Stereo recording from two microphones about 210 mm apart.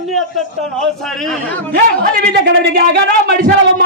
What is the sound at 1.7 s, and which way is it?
Speech, 45° right (ahead or behind).